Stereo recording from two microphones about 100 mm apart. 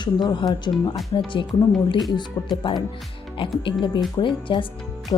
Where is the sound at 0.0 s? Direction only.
50° left (ahead or behind).